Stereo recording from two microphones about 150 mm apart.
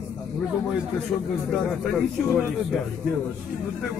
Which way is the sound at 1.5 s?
Centre (ahead or behind).